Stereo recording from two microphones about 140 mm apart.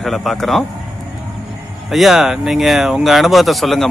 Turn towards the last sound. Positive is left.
turn(degrees=0)  # may be behind; listen again after turning